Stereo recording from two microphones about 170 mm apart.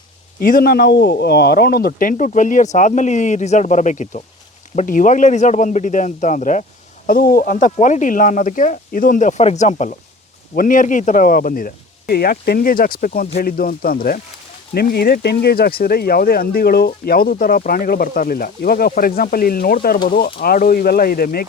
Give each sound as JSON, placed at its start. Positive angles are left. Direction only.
{"t": 0.3, "sound": "speech", "side_deg": 60}
{"t": 7.1, "sound": "speech", "side_deg": 60}